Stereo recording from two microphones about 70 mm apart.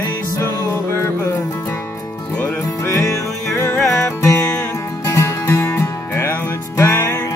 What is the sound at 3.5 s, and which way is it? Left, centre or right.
Music, left.